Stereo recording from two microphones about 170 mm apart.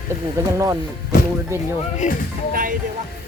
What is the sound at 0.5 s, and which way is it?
Speech, 20° right (ahead or behind).